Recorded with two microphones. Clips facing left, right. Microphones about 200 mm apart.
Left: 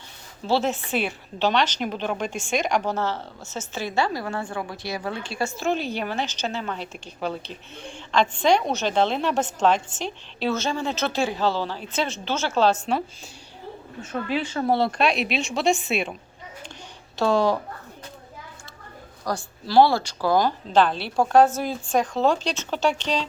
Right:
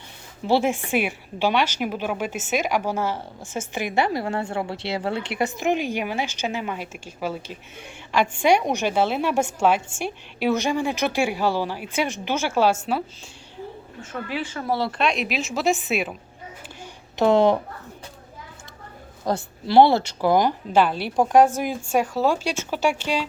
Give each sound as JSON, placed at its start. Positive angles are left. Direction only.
{"t": 0.4, "sound": "a woman's voice", "side_deg": -15}
{"t": 14.7, "sound": "speech", "side_deg": 50}
{"t": 15.2, "sound": "a woman's voice", "side_deg": 0}
{"t": 17.2, "sound": "speech", "side_deg": -20}
{"t": 19.2, "sound": "a woman's voice", "side_deg": -25}